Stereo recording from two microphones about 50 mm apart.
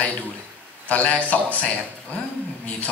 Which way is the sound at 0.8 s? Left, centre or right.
Left.